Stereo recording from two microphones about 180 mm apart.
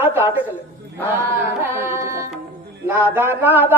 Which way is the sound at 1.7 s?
15° right (ahead or behind).